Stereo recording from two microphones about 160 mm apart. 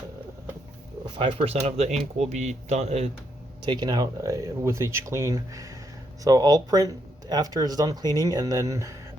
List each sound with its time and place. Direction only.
1.0 s speech: 35° right (ahead or behind)
3.6 s speech: 25° right (ahead or behind)